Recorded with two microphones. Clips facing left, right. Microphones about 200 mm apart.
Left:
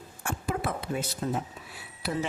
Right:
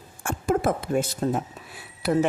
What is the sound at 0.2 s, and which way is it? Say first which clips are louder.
A woman's voice: right 8 dB; 45° right (ahead or behind).